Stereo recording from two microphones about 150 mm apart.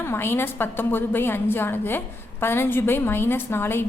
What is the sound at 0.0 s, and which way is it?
A woman's voice, 15° left (ahead or behind).